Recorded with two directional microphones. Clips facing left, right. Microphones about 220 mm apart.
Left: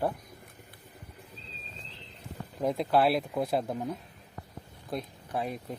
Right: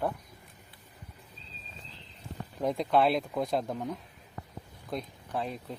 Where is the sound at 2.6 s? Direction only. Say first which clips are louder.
Left 1 dB; 5° left (ahead or behind).